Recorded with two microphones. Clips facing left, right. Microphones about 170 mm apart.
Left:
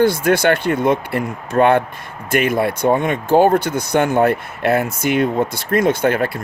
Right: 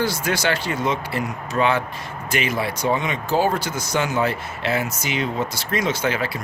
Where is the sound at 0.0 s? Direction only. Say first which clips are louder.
Left 8 dB; 55° left (ahead or behind).